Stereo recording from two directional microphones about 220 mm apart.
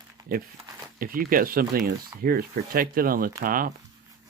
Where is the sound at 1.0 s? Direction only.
40° right (ahead or behind).